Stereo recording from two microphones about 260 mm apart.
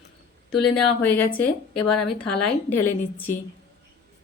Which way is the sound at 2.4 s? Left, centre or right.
Centre.